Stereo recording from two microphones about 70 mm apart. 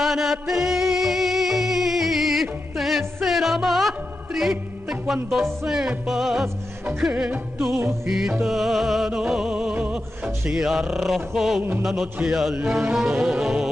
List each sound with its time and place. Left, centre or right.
0.0 s music: centre
5.7 s mantra: centre
7.0 s music: centre
8.4 s music: centre
9.8 s music: right
10.5 s mantra: centre
12.5 s music: centre